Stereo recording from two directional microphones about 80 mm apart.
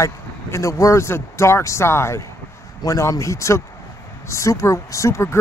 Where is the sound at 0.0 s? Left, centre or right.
Left.